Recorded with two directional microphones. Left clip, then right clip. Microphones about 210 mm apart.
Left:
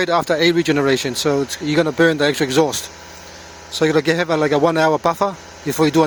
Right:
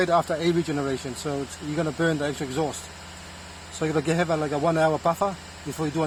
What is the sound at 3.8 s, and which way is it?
Speech, 30° left (ahead or behind).